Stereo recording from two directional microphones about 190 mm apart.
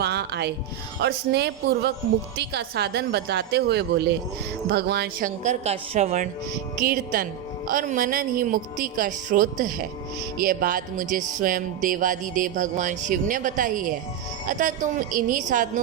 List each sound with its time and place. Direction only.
0.0 s music: 60° right (ahead or behind)
1.0 s a woman's voice: 60° right (ahead or behind); by 6.2 s 40° right (ahead or behind)
6.8 s music: 50° right (ahead or behind)